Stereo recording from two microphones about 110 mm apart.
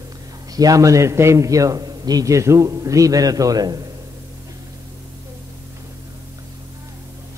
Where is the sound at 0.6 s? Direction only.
30° right (ahead or behind).